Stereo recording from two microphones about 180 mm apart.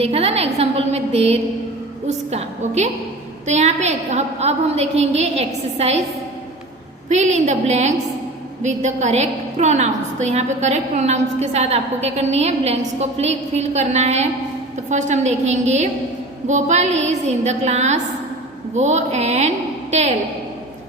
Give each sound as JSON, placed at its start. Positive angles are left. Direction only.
{"t": 0.0, "sound": "a woman's voice", "side_deg": -35}
{"t": 7.1, "sound": "a woman's voice", "side_deg": -40}